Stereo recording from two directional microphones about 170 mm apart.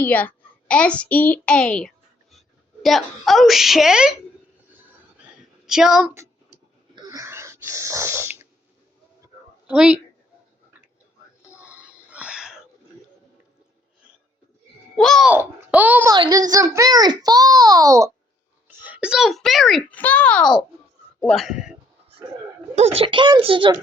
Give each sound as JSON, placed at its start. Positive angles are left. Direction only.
{"t": 0.0, "sound": "a child's voice", "side_deg": 10}
{"t": 5.4, "sound": "a sound", "side_deg": -5}
{"t": 6.9, "sound": "wheeze", "side_deg": -25}
{"t": 9.6, "sound": "a child's voice", "side_deg": -5}
{"t": 11.4, "sound": "whispering", "side_deg": -5}
{"t": 14.9, "sound": "a child's voice", "side_deg": 0}
{"t": 15.3, "sound": "a child's voice", "side_deg": -10}
{"t": 16.1, "sound": "a child's voice", "side_deg": -25}
{"t": 18.8, "sound": "a child's voice", "side_deg": -10}
{"t": 22.7, "sound": "speech", "side_deg": -35}